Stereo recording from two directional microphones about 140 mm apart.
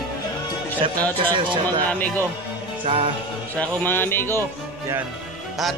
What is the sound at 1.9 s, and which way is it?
Speech, 10° left (ahead or behind).